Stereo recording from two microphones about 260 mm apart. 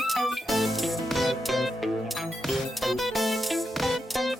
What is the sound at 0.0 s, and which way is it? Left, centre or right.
Music, centre.